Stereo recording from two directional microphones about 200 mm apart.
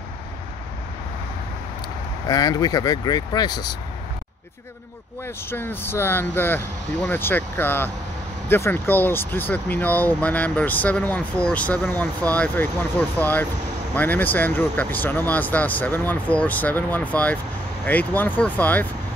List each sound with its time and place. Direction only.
2.2 s speech: 20° left (ahead or behind)
5.5 s speech: 10° left (ahead or behind)